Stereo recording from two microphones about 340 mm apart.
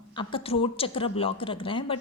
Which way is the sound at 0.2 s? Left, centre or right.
Centre.